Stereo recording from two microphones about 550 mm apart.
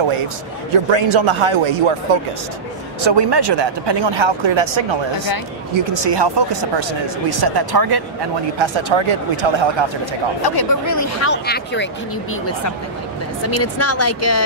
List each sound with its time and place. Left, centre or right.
0.8 s speech: right
3.0 s speech: right
8.5 s speech: right
10.4 s speech: left; by 11.9 s centre
13.5 s speech: left